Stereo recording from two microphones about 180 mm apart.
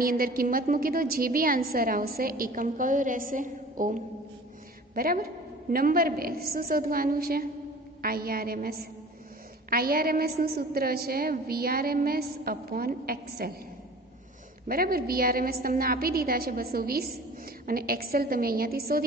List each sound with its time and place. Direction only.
0.0 s a woman's voice: 55° right (ahead or behind)
14.7 s a woman's voice: 55° right (ahead or behind)